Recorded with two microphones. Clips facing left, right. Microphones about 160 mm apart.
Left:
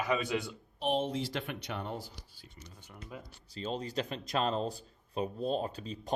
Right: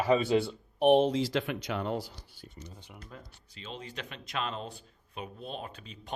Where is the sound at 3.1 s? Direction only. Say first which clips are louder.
Left 3 dB; 10° left (ahead or behind).